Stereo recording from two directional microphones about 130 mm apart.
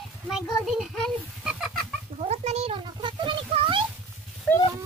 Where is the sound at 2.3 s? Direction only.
55° right (ahead or behind).